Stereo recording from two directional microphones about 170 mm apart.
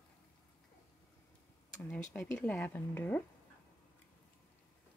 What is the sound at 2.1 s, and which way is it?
Speech, 10° left (ahead or behind).